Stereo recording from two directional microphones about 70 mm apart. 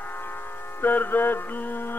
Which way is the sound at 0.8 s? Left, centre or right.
Left.